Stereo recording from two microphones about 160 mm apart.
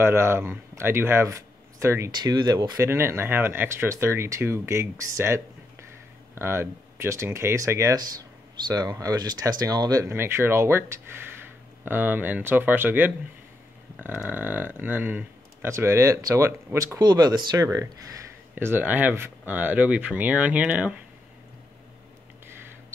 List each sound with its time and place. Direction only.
0.0 s speech: 15° right (ahead or behind)